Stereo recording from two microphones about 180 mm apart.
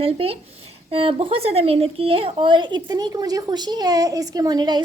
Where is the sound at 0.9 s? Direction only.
30° right (ahead or behind).